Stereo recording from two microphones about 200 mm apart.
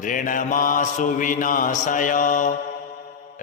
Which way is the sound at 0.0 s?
40° left (ahead or behind).